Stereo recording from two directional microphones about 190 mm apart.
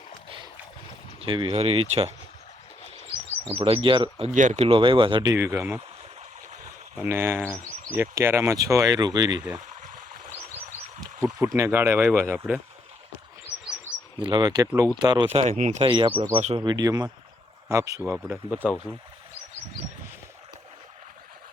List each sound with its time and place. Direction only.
1.2 s speech: 25° right (ahead or behind)
3.1 s speech: 25° right (ahead or behind)
4.3 s speech: 40° right (ahead or behind); by 5.3 s 25° right (ahead or behind)
5.3 s speech: 15° right (ahead or behind)
7.0 s speech: 10° right (ahead or behind)
11.3 s speech: 15° right (ahead or behind)
14.2 s speech: 25° right (ahead or behind)
15.9 s speech: 25° right (ahead or behind)
16.6 s speech: 20° right (ahead or behind)